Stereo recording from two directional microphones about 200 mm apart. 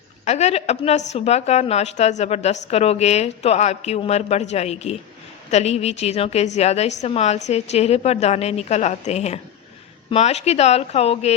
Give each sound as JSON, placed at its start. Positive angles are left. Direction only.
{"t": 0.3, "sound": "a woman's voice", "side_deg": 35}